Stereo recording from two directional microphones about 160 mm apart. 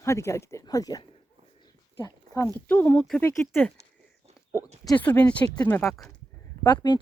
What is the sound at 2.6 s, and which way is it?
Speech, 10° left (ahead or behind).